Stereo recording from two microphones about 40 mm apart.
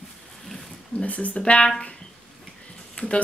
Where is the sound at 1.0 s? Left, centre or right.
Left.